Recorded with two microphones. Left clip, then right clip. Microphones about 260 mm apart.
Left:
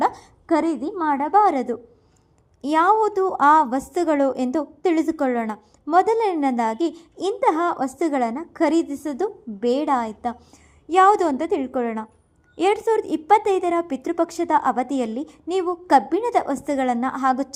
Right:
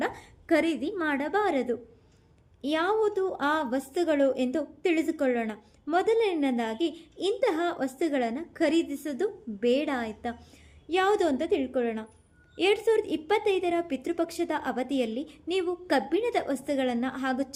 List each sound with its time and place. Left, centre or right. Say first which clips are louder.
1.2 s a woman's voice: left 12 dB; centre